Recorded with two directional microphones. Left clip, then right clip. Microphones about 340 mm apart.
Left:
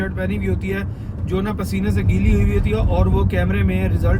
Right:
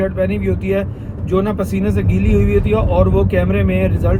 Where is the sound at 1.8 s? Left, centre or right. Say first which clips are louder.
Right 4 dB; centre.